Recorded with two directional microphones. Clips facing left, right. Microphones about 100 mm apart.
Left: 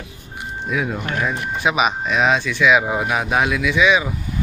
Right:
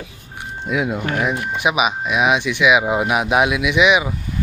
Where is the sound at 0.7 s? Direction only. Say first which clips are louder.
Right 3 dB; 20° right (ahead or behind).